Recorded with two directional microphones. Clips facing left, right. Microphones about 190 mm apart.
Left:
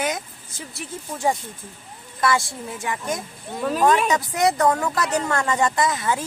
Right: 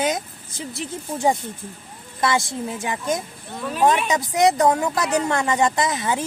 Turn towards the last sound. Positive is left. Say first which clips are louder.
# even
turn(degrees=-20)  # may be behind; listen again after turning